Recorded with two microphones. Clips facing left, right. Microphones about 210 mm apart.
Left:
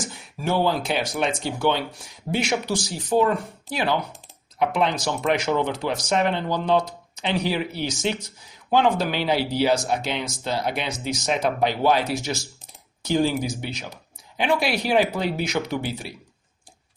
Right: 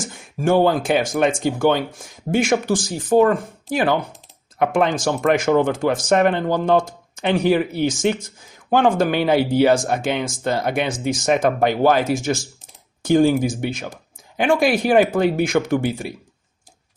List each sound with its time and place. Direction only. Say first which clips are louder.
0.1 s speech: right 9 dB; 50° right (ahead or behind)